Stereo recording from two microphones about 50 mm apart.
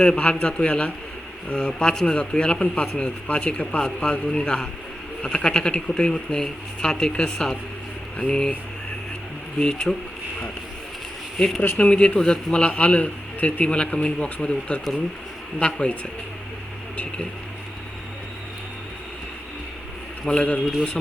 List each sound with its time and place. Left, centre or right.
0.0 s a man's voice: centre
9.6 s speech: centre
11.3 s a man's voice: centre
20.2 s a man's voice: centre